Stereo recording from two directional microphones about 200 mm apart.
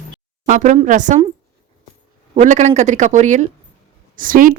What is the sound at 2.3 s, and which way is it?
Speech, 35° right (ahead or behind).